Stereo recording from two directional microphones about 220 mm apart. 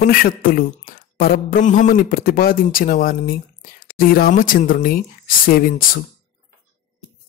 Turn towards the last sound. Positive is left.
turn(degrees=40)  # may be behind; listen again after turning